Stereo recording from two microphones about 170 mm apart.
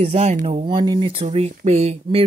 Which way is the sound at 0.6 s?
30° right (ahead or behind).